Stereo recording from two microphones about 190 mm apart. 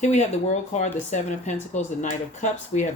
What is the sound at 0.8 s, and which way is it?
Speech, 40° left (ahead or behind).